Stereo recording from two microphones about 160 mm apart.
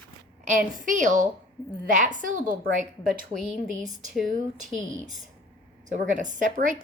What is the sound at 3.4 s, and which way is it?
Speech, centre (ahead or behind).